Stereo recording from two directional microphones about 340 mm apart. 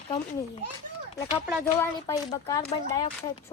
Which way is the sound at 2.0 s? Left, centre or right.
Centre.